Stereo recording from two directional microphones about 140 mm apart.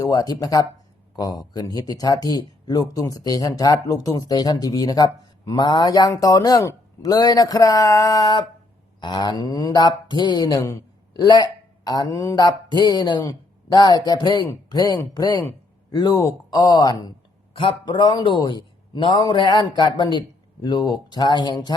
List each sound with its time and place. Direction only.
0.0 s speech: 25° left (ahead or behind)
17.5 s a man's voice: 40° left (ahead or behind)